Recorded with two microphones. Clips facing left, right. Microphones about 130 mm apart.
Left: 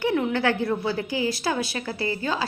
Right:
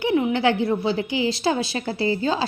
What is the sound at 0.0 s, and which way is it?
A woman's voice, 15° right (ahead or behind).